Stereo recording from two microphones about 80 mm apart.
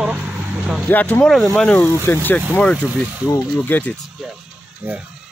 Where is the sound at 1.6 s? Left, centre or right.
Centre.